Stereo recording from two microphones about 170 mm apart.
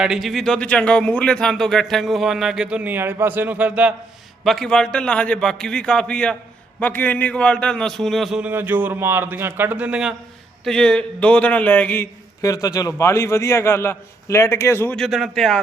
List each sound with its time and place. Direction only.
0.0 s speech: centre (ahead or behind)
4.4 s a man's voice: 5° left (ahead or behind)